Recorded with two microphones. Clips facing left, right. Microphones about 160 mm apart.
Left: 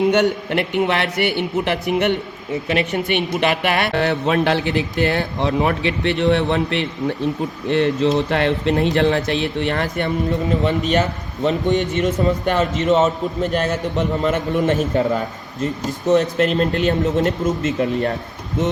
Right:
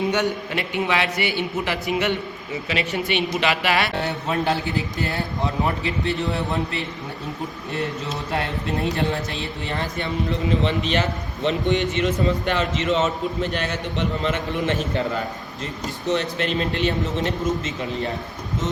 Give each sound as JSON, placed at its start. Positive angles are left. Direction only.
{"t": 0.1, "sound": "a man's voice", "side_deg": 60}
{"t": 3.9, "sound": "a man's voice", "side_deg": 90}
{"t": 7.7, "sound": "a man's voice", "side_deg": 90}
{"t": 10.7, "sound": "a man's voice", "side_deg": 45}
{"t": 16.0, "sound": "a man's voice", "side_deg": 45}